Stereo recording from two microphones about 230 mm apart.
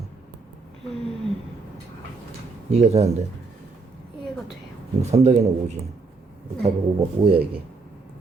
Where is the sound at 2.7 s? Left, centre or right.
Right.